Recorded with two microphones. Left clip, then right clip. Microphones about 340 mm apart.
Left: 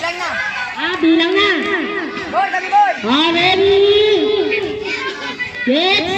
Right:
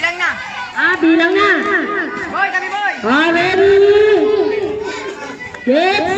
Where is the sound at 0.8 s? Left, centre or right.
Right.